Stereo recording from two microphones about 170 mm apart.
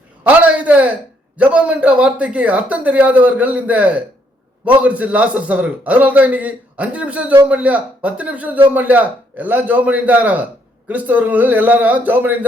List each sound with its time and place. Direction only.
0.3 s a man's voice: 10° right (ahead or behind)